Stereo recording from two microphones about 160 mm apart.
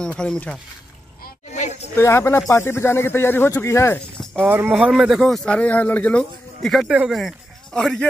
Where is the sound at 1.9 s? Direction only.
15° left (ahead or behind).